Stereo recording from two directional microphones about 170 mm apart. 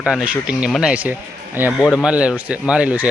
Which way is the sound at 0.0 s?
5° right (ahead or behind).